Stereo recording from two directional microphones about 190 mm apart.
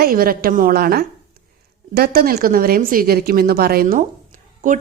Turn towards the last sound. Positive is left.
turn(degrees=-45)  # may be behind; listen again after turning